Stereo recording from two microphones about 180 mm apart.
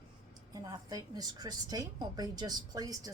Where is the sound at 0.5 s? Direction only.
20° right (ahead or behind).